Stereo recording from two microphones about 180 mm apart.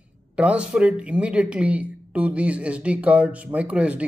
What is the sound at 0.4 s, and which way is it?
Speech, 5° right (ahead or behind).